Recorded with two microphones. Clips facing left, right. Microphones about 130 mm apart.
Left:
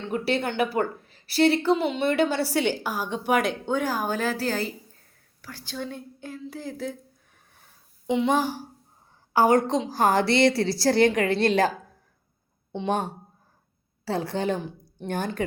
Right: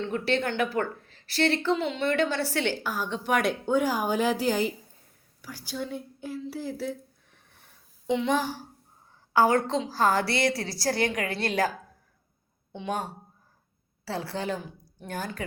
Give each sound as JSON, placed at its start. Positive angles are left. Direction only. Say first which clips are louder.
{"t": 0.1, "sound": "a woman's voice", "louder": "left 4 dB", "side_deg": 10}
{"t": 3.4, "sound": "speech", "louder": "right 1 dB", "side_deg": -10}
{"t": 8.0, "sound": "a woman's voice", "louder": "left 3 dB", "side_deg": 15}
{"t": 12.7, "sound": "a woman's voice", "louder": "left 5 dB", "side_deg": 30}